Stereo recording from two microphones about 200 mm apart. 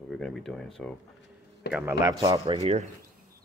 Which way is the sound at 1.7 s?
10° right (ahead or behind).